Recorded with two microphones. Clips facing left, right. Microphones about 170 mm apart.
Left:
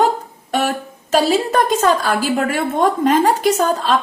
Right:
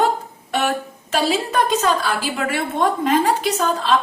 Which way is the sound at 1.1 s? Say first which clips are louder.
Left 4 dB; 40° left (ahead or behind).